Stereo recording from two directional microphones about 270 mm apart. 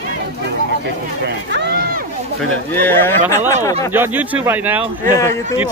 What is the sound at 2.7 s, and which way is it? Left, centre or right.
Speech, centre.